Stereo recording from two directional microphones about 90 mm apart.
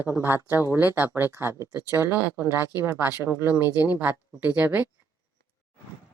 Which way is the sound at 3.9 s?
20° right (ahead or behind).